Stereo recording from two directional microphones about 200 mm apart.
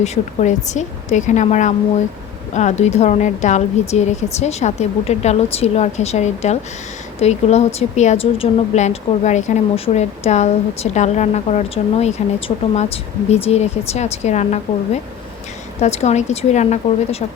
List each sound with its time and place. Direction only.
0.0 s speech: 35° left (ahead or behind)
15.8 s speech: 30° left (ahead or behind)